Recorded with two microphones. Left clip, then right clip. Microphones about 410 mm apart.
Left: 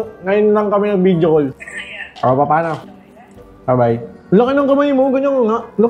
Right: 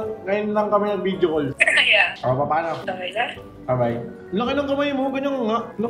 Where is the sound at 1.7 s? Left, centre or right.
Right.